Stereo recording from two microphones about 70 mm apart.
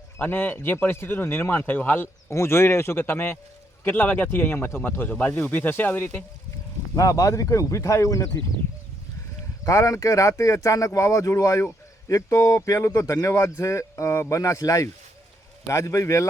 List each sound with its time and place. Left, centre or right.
0.2 s speech: left
2.3 s speech: left
6.9 s speech: left
9.6 s speech: left
15.6 s speech: left